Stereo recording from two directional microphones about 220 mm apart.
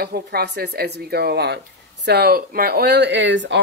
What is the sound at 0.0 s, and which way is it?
Speech, 45° right (ahead or behind).